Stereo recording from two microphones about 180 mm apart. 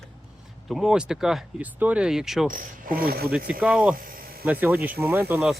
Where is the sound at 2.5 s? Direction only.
55° right (ahead or behind).